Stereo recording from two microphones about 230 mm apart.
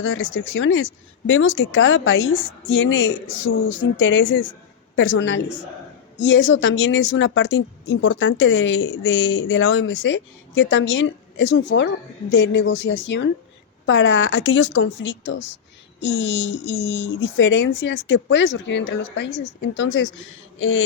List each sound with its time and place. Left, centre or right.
0.0 s a woman's voice: left